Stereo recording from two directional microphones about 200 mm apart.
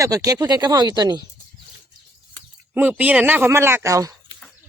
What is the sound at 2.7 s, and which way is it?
Speech, 10° right (ahead or behind).